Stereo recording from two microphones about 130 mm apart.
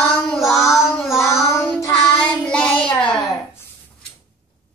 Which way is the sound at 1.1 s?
20° left (ahead or behind).